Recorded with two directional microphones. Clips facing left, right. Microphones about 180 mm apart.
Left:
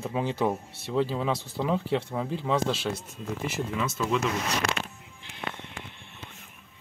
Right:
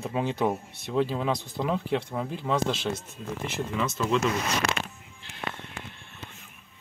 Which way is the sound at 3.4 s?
5° left (ahead or behind).